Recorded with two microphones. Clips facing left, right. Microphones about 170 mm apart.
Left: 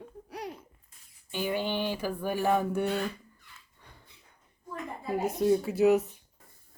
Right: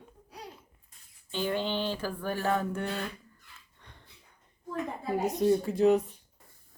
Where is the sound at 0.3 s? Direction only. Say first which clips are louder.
Left 7 dB; 70° left (ahead or behind).